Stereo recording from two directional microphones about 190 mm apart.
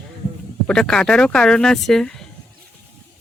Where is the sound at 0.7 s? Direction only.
5° left (ahead or behind).